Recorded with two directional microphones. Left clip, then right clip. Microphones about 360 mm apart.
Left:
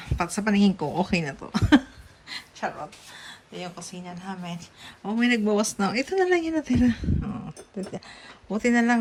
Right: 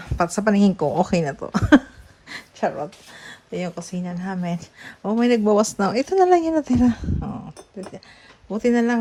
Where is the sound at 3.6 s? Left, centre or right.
Right.